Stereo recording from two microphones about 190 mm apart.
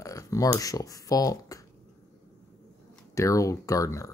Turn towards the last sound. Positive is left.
turn(degrees=15)  # may be behind; listen again after turning